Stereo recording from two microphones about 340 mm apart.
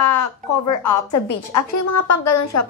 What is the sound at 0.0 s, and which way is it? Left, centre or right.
Speech, left.